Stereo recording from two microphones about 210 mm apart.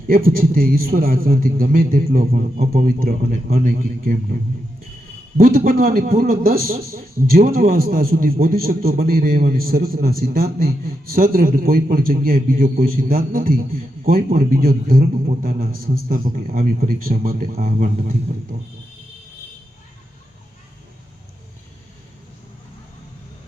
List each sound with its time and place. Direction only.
0.1 s a man's voice: 40° right (ahead or behind)
5.4 s a man's voice: 40° right (ahead or behind)